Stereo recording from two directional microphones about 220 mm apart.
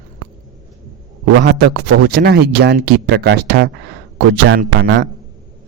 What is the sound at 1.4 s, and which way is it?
Speech, 50° right (ahead or behind).